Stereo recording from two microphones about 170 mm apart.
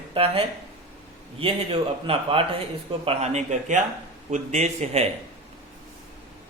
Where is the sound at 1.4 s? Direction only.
35° right (ahead or behind).